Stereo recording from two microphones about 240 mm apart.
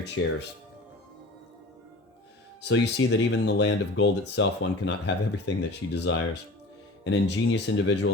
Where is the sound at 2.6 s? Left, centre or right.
Left.